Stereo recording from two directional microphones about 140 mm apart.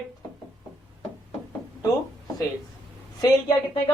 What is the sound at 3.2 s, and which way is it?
Speech, 30° left (ahead or behind).